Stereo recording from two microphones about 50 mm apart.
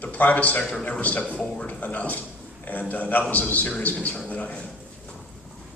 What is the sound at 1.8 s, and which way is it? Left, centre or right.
A man's voice, left.